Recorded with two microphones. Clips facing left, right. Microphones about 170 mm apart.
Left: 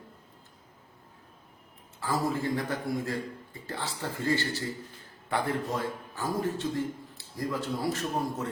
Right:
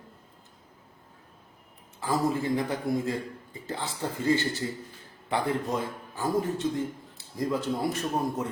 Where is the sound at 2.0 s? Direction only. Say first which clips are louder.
Right 3 dB; 15° right (ahead or behind).